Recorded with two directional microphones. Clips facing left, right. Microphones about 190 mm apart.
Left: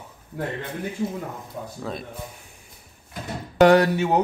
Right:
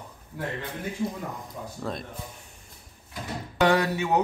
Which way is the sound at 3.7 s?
35° left (ahead or behind).